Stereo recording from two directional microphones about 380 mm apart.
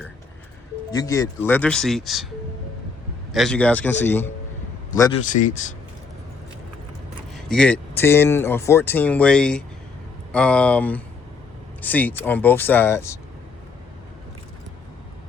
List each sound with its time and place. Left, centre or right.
0.9 s speech: centre
3.3 s speech: centre
5.3 s speech: centre
7.4 s speech: centre